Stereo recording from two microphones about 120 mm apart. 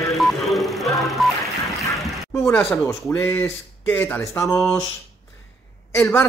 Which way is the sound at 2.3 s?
25° left (ahead or behind).